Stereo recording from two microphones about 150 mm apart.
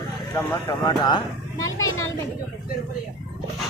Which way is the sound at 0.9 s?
30° left (ahead or behind).